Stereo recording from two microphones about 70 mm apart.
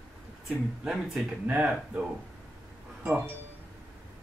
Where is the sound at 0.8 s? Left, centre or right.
Centre.